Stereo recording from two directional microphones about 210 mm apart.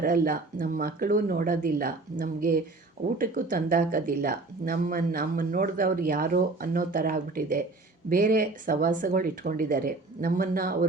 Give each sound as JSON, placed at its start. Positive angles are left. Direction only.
{"t": 0.0, "sound": "speech", "side_deg": -40}